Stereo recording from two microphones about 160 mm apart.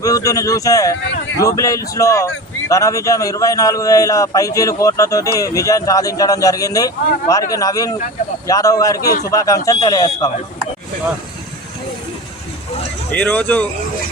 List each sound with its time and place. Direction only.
0.0 s speech: 20° left (ahead or behind)
13.1 s speech: 10° left (ahead or behind)